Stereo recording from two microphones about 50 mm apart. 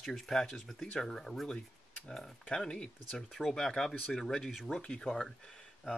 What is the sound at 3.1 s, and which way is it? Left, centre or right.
Speech, centre.